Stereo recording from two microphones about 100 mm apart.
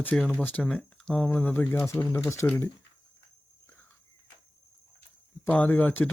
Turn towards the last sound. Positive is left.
turn(degrees=15)  # may be behind; listen again after turning